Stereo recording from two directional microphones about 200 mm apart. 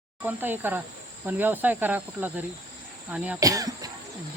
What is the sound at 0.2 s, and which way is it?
Speech, 10° right (ahead or behind).